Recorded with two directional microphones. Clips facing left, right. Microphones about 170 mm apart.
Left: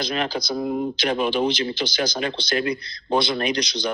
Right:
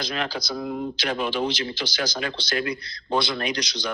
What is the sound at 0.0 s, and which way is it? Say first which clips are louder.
Speech: left 4 dB; 20° left (ahead or behind).